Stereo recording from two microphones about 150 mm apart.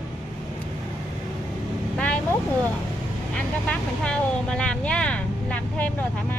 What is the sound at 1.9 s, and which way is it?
Vehicle, 10° left (ahead or behind).